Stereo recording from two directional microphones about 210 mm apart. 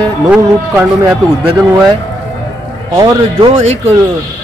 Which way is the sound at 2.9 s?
15° right (ahead or behind).